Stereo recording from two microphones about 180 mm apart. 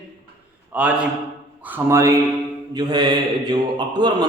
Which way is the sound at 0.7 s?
5° right (ahead or behind).